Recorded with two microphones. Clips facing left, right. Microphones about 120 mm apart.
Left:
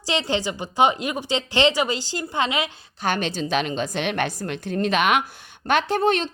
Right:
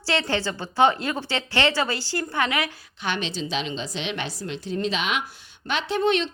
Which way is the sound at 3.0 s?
45° left (ahead or behind).